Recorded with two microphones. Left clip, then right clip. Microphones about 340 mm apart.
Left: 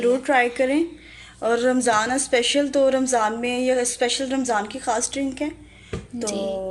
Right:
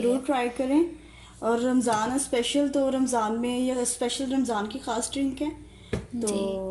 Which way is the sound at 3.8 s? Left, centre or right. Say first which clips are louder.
Left 6 dB; left.